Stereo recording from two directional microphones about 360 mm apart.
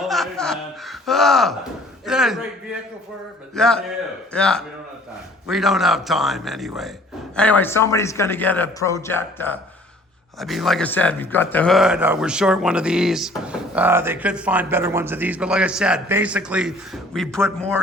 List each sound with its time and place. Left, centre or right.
0.0 s a sound: centre
2.0 s speech: centre
3.5 s a man's voice: centre